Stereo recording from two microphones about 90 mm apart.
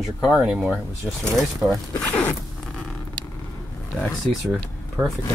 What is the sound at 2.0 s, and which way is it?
Zipper, 15° left (ahead or behind).